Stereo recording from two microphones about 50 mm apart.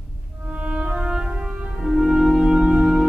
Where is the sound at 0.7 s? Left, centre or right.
Right.